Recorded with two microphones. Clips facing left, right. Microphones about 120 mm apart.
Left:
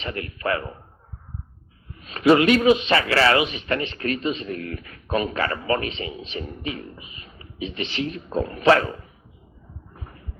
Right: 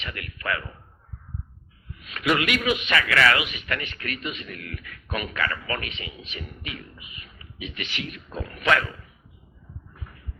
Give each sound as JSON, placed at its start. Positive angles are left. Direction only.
{"t": 0.0, "sound": "a man's voice", "side_deg": 30}
{"t": 2.0, "sound": "a man's voice", "side_deg": 35}
{"t": 9.9, "sound": "a sound", "side_deg": 30}